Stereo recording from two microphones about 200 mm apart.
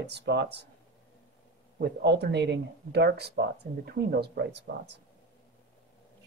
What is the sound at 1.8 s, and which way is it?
Speech, 55° right (ahead or behind).